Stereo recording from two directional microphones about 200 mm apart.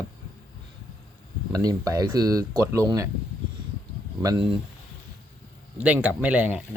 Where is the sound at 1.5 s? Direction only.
20° right (ahead or behind).